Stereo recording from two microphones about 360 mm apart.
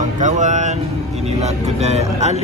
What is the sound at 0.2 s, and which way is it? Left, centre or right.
Speech, centre.